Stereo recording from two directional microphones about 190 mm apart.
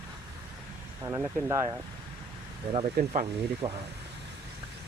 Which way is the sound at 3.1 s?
35° right (ahead or behind).